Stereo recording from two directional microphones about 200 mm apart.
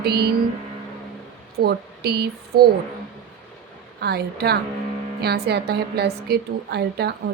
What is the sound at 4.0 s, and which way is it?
A woman's voice, 55° right (ahead or behind).